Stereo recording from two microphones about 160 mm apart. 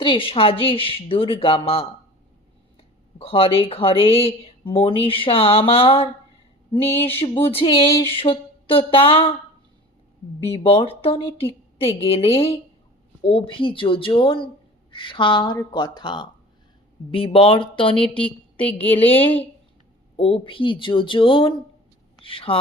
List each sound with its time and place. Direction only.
0.0 s speech: 35° left (ahead or behind)
3.2 s speech: 35° left (ahead or behind)
7.2 s speech: 35° left (ahead or behind)
8.1 s a sound: 35° left (ahead or behind)
10.5 s speech: 35° left (ahead or behind)
18.2 s a sound: 10° left (ahead or behind)
20.1 s speech: 35° left (ahead or behind)